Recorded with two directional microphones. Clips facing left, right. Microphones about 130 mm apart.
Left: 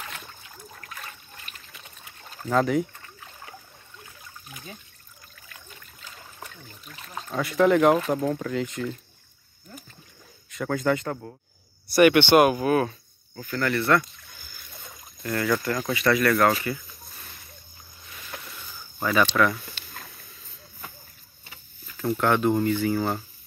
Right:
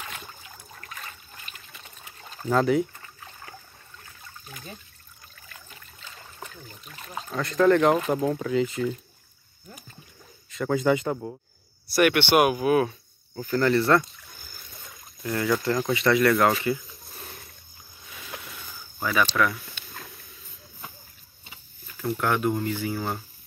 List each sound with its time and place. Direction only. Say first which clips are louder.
0.7 s trickle: right 1 dB; centre (ahead or behind)
2.4 s speech: right 1 dB; centre (ahead or behind)
5.5 s speech: even; 5° left (ahead or behind)
10.5 s speech: right 2 dB; centre (ahead or behind)
11.9 s speech: left 4 dB; centre (ahead or behind)
13.4 s speech: right 4 dB; 30° right (ahead or behind)
15.2 s speech: even; 15° right (ahead or behind)
18.9 s speech: left 2 dB; centre (ahead or behind)
22.2 s speech: left 4 dB; 5° right (ahead or behind)